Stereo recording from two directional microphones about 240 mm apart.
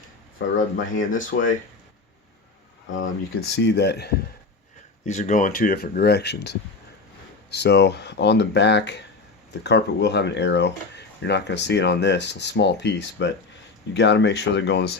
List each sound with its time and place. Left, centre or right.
0.3 s speech: left
2.8 s speech: left
5.0 s speech: left